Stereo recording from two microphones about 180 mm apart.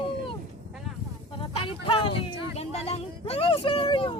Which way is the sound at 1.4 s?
30° left (ahead or behind).